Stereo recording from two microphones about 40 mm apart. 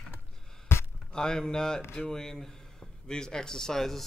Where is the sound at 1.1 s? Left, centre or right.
Centre.